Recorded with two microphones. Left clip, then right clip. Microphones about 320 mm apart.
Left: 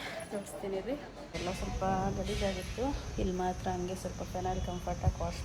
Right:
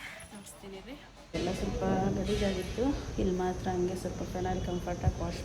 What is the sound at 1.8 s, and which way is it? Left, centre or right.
Speech, centre.